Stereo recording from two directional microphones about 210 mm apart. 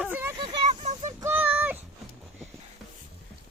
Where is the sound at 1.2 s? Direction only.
10° right (ahead or behind).